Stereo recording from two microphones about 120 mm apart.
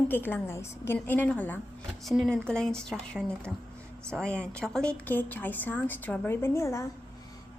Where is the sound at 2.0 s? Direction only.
Centre (ahead or behind).